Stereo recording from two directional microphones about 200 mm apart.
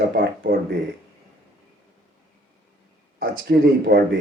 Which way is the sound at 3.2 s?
50° right (ahead or behind).